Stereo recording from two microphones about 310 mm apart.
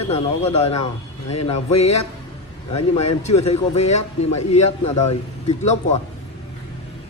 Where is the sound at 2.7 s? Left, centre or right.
Left.